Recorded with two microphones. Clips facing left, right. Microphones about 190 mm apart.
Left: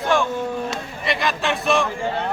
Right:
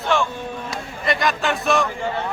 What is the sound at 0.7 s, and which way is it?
Speech, centre (ahead or behind).